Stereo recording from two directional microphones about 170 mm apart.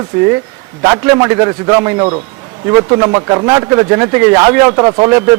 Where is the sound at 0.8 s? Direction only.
20° right (ahead or behind).